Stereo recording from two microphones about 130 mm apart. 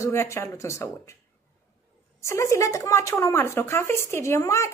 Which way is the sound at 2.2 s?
20° left (ahead or behind).